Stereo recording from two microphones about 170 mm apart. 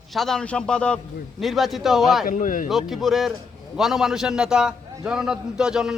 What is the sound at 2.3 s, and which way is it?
Speech, 50° left (ahead or behind).